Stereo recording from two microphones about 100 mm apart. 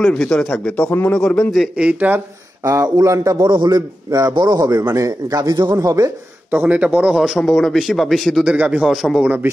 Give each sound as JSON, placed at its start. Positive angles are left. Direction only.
{"t": 0.0, "sound": "a man's voice", "side_deg": 10}
{"t": 1.9, "sound": "speech", "side_deg": -15}
{"t": 2.6, "sound": "a man's voice", "side_deg": -35}
{"t": 3.4, "sound": "a man's voice", "side_deg": -50}
{"t": 6.5, "sound": "a man's voice", "side_deg": -20}
{"t": 8.5, "sound": "speech", "side_deg": -15}
{"t": 8.8, "sound": "a man's voice", "side_deg": -5}